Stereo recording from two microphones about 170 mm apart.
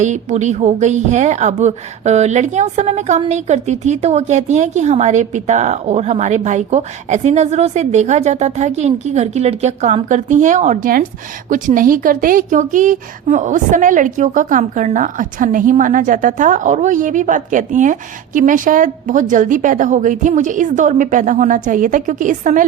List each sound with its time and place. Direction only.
0.0 s a woman's voice: 45° right (ahead or behind)